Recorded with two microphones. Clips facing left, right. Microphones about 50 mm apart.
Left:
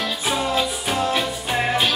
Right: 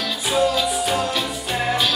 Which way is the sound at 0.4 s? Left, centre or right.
Left.